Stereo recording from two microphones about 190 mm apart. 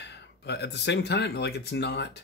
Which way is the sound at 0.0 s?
65° left (ahead or behind).